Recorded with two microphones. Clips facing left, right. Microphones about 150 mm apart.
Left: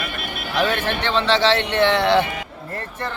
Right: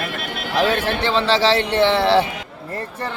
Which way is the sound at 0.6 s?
35° right (ahead or behind).